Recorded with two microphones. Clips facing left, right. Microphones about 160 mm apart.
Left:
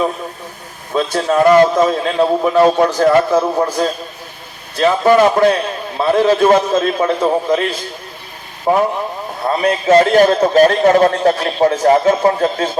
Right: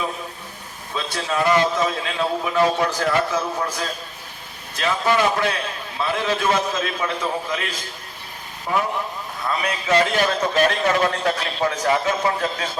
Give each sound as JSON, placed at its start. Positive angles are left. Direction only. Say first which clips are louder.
{"t": 0.9, "sound": "a man's voice", "louder": "left 10 dB", "side_deg": 45}